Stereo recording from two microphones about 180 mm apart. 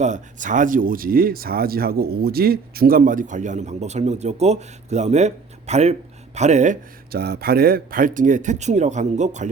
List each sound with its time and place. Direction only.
0.0 s speech: 45° right (ahead or behind)
7.1 s speech: 60° right (ahead or behind); by 9.5 s 40° right (ahead or behind)